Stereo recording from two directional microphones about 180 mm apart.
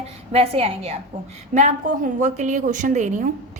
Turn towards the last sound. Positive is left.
turn(degrees=-45)  # may be behind; listen again after turning